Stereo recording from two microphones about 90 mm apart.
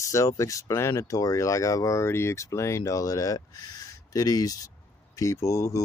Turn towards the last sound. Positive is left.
turn(degrees=35)  # may be behind; listen again after turning